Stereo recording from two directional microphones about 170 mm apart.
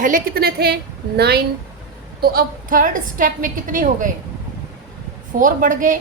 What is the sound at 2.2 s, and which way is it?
A woman's voice, 55° right (ahead or behind).